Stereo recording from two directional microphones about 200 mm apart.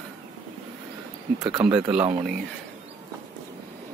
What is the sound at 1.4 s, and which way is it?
Speech, 20° right (ahead or behind).